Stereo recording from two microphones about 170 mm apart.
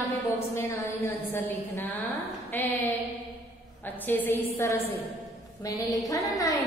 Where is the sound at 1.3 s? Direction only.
10° left (ahead or behind).